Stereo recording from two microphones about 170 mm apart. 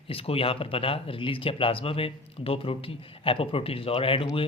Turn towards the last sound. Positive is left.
turn(degrees=30)  # may be behind; listen again after turning